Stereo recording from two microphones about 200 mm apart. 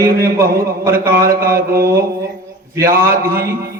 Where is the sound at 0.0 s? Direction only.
15° right (ahead or behind).